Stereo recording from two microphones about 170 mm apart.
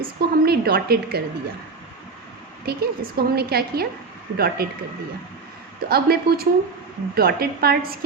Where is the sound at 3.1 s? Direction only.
65° right (ahead or behind).